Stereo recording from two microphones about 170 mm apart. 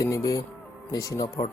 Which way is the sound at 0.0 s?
20° left (ahead or behind).